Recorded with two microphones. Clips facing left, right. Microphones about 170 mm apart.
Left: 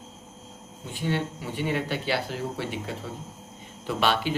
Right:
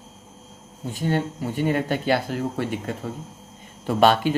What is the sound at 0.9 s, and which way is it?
Speech, 45° right (ahead or behind).